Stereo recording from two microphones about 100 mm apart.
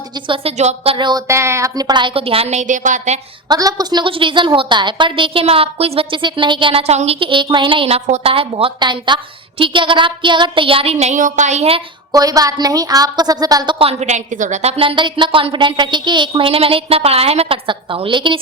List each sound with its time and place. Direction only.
0.3 s speech: 85° right
0.9 s a woman's voice: 50° right (ahead or behind)
1.3 s a woman's voice: 30° right (ahead or behind); by 2.5 s 70° right (ahead or behind)
3.5 s a woman's voice: 40° right (ahead or behind)
4.0 s a woman's voice: 60° right (ahead or behind)
8.8 s a woman's voice: 50° right (ahead or behind); by 11.1 s 75° right (ahead or behind)
12.1 s a woman's voice: 40° right (ahead or behind)
13.7 s a woman's voice: 70° right (ahead or behind)
17.7 s a woman's voice: 60° right (ahead or behind)